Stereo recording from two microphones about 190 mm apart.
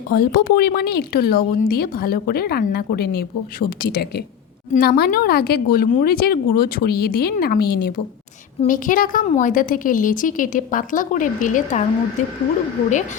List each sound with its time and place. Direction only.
0.1 s speech: 50° left (ahead or behind)
8.6 s speech: 45° left (ahead or behind)